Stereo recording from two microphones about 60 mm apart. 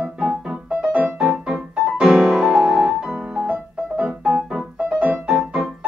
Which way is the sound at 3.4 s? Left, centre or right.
Right.